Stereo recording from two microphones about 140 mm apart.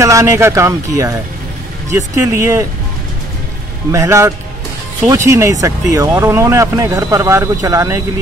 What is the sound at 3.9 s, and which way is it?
Speech, 20° right (ahead or behind).